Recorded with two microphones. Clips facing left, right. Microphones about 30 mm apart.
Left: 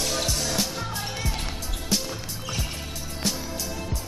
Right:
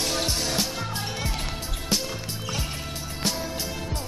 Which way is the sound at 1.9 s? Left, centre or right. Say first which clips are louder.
Even; centre.